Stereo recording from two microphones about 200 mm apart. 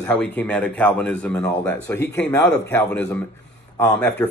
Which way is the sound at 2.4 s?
60° left (ahead or behind).